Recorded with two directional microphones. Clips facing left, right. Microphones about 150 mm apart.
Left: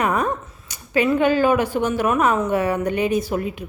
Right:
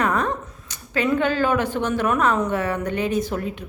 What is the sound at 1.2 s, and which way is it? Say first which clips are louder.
A woman's voice: left 4 dB; 10° left (ahead or behind).